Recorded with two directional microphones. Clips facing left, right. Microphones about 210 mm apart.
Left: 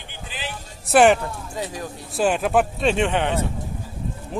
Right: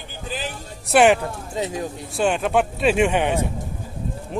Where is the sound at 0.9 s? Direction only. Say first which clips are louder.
Even; centre (ahead or behind).